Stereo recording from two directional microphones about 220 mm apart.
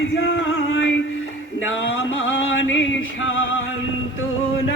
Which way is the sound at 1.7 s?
60° left (ahead or behind).